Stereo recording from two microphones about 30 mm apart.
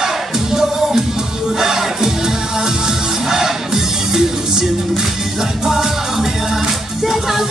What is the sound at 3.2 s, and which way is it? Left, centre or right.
Music, centre.